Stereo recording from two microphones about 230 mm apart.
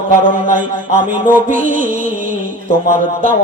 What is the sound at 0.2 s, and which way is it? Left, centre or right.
A man's voice, right.